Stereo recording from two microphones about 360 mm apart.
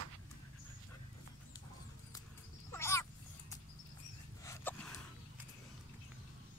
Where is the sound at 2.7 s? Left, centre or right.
Centre.